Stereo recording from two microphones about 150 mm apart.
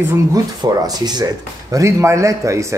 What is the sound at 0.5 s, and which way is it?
Speech, 25° right (ahead or behind).